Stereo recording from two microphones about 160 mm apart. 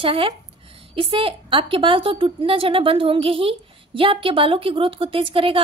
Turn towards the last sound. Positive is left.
turn(degrees=-35)  # may be behind; listen again after turning